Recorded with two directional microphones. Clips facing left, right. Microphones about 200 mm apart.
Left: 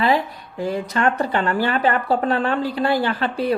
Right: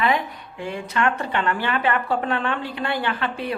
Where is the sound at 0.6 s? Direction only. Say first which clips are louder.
Left 3 dB; 40° left (ahead or behind).